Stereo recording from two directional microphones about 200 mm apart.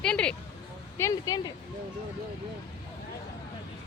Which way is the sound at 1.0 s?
20° left (ahead or behind).